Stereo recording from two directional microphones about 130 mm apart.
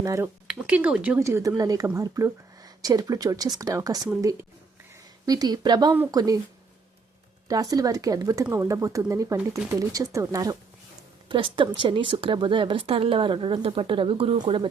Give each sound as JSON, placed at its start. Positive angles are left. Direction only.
{"t": 0.0, "sound": "a woman's voice", "side_deg": -25}
{"t": 0.4, "sound": "speech", "side_deg": -10}
{"t": 1.2, "sound": "a woman's voice", "side_deg": -25}
{"t": 5.2, "sound": "a woman's voice", "side_deg": -30}
{"t": 7.4, "sound": "a woman's voice", "side_deg": -30}
{"t": 11.3, "sound": "speech", "side_deg": -40}